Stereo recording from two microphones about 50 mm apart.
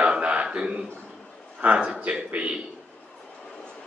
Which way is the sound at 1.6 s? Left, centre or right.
Right.